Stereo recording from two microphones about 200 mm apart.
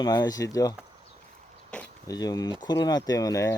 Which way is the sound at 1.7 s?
5° left (ahead or behind).